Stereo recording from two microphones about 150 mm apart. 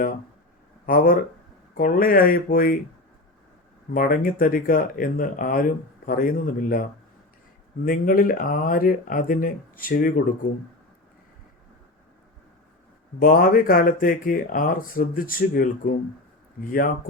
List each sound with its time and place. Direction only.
0.9 s speech: 70° left (ahead or behind)
3.9 s speech: 70° left (ahead or behind)
7.9 s speech: 70° left (ahead or behind)
13.1 s speech: 75° left (ahead or behind)